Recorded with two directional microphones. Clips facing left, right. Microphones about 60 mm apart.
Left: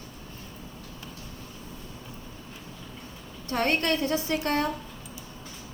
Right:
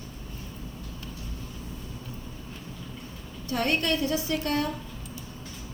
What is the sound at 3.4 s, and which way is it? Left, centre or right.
Speech, left.